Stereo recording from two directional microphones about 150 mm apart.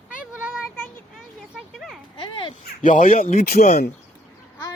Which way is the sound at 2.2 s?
35° left (ahead or behind).